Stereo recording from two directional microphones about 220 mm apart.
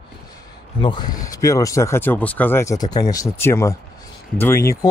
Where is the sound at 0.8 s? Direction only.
20° left (ahead or behind).